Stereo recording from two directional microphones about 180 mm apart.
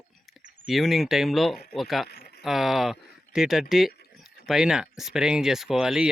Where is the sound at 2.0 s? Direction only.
60° left (ahead or behind).